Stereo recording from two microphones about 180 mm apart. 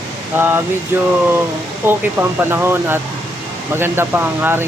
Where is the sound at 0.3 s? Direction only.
10° right (ahead or behind).